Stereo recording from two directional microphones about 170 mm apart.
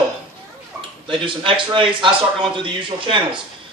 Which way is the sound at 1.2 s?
30° right (ahead or behind).